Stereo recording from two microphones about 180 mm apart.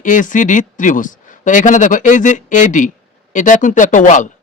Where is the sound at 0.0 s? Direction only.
45° left (ahead or behind).